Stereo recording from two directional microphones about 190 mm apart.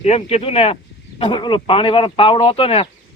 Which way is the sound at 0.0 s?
35° left (ahead or behind).